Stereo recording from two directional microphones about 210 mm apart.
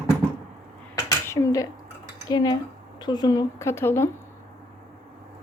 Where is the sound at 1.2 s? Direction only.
15° left (ahead or behind).